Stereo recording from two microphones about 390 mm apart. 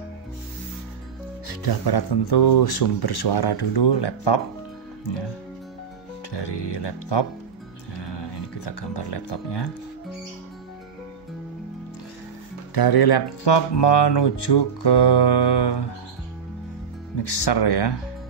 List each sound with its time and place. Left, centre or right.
1.5 s speech: left
6.3 s speech: left
7.9 s music: left
12.7 s speech: left
17.2 s speech: left